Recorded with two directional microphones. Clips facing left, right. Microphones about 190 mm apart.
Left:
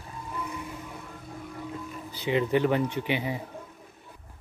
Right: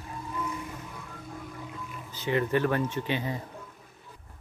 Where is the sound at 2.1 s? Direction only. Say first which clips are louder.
Left 2 dB; 15° left (ahead or behind).